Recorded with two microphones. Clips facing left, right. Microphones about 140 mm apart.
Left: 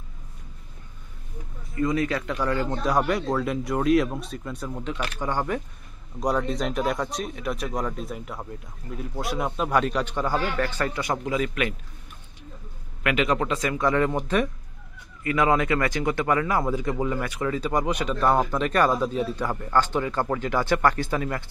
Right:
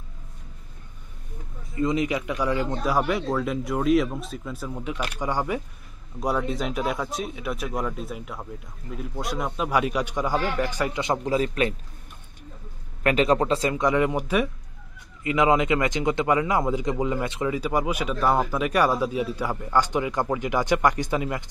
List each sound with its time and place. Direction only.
1.8 s a man's voice: 20° right (ahead or behind); by 9.7 s centre (ahead or behind)
9.7 s a man's voice: 10° right (ahead or behind); by 11.7 s 35° right (ahead or behind)
13.0 s a man's voice: 35° right (ahead or behind); by 14.5 s 10° right (ahead or behind)
15.2 s a man's voice: 20° right (ahead or behind)
17.6 s a man's voice: 5° right (ahead or behind)